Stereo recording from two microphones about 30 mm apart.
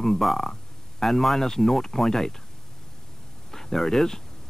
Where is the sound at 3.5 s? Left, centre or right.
Centre.